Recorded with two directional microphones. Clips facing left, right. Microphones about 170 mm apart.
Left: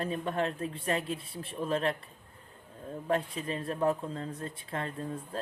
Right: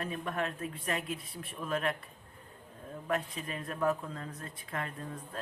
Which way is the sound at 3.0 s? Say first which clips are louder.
Left 4 dB; 30° left (ahead or behind).